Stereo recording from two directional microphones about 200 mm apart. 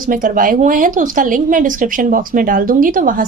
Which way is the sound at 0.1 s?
40° right (ahead or behind).